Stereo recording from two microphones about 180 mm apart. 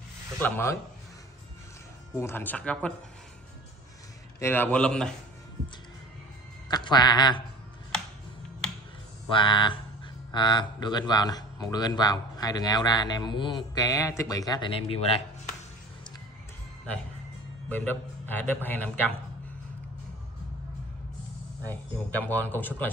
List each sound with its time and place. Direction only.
0.4 s a man's voice: 10° left (ahead or behind)
2.1 s a man's voice: 10° left (ahead or behind)
4.4 s a man's voice: 10° left (ahead or behind)
6.7 s a man's voice: 25° left (ahead or behind)
8.6 s finger snapping: 5° left (ahead or behind)
9.3 s speech: 25° left (ahead or behind)
17.6 s a man's voice: 10° left (ahead or behind)
21.6 s a man's voice: 10° left (ahead or behind)